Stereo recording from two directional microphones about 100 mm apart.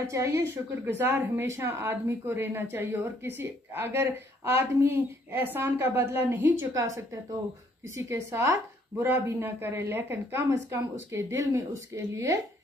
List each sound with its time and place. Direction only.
0.0 s speech: 30° right (ahead or behind)
6.7 s speech: 35° right (ahead or behind)
9.0 s speech: 20° right (ahead or behind)